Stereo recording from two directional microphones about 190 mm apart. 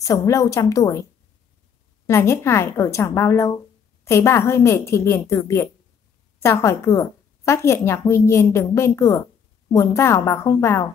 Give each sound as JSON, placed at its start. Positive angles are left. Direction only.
{"t": 0.0, "sound": "a woman's voice", "side_deg": 15}
{"t": 2.0, "sound": "a woman's voice", "side_deg": 15}